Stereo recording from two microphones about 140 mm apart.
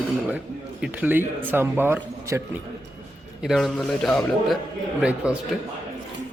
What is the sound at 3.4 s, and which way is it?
A man's voice, centre (ahead or behind).